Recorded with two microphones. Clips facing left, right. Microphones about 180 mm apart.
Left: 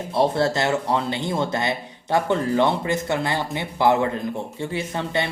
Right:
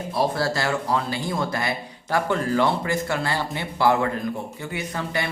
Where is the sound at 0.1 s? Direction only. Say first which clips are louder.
Left 4 dB; 25° left (ahead or behind).